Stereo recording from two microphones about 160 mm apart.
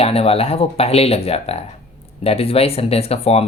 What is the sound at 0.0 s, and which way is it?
Speech, 40° left (ahead or behind).